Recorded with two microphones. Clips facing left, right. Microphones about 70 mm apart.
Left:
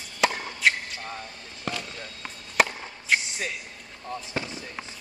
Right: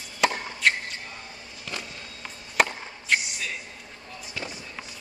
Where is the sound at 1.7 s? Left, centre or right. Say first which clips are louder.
Left 4 dB; left.